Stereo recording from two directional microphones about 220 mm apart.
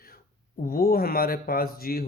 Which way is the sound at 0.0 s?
40° left (ahead or behind).